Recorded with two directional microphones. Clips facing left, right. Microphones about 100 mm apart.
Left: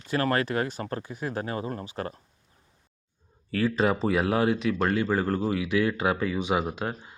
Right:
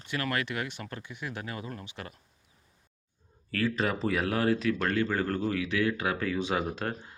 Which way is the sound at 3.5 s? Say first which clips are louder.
Left 5 dB; 30° left (ahead or behind).